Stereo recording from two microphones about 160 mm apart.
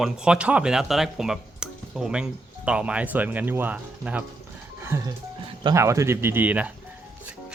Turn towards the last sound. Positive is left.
turn(degrees=-10)  # may be behind; listen again after turning